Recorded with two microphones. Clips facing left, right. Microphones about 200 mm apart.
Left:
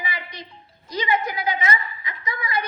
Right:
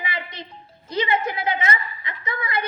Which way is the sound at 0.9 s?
30° right (ahead or behind).